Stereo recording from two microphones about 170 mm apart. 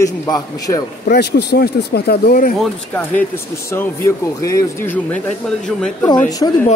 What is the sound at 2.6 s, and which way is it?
Speech, 10° left (ahead or behind).